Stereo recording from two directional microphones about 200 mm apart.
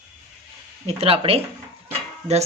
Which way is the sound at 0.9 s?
30° right (ahead or behind).